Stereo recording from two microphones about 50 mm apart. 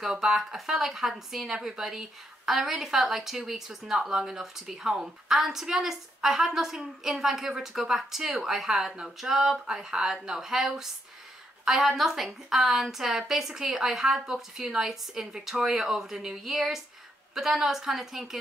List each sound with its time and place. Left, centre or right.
0.0 s a woman's voice: centre